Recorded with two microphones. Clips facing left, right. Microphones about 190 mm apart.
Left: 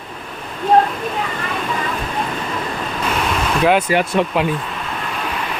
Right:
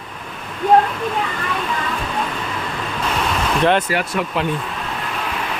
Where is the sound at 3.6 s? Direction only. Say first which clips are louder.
Left 2 dB; 10° left (ahead or behind).